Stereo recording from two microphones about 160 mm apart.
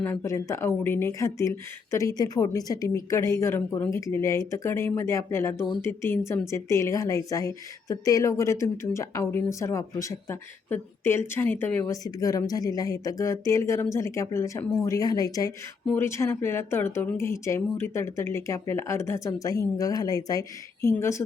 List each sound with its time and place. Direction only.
0.0 s a woman's voice: 15° left (ahead or behind)